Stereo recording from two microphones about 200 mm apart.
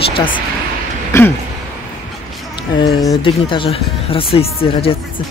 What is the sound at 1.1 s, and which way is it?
Speech, 15° left (ahead or behind).